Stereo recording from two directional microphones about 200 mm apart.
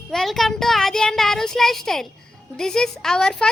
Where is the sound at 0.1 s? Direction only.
Centre (ahead or behind).